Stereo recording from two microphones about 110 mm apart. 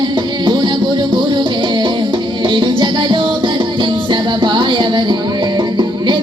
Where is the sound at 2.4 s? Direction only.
45° right (ahead or behind).